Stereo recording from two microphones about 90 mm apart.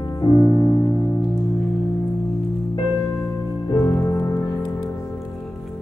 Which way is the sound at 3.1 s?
30° left (ahead or behind).